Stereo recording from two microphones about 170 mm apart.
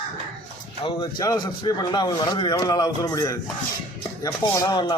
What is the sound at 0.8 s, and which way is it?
A man's voice, 25° left (ahead or behind).